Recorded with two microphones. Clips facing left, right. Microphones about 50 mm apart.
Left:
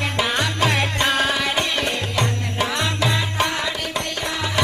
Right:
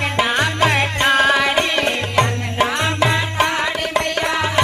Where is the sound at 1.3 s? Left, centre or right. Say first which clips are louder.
Right 5 dB; right.